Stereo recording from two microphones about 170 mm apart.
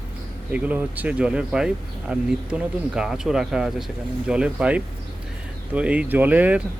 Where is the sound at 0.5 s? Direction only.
10° right (ahead or behind).